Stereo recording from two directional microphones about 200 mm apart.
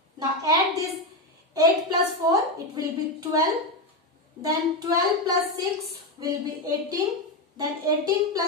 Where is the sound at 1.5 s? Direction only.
20° right (ahead or behind).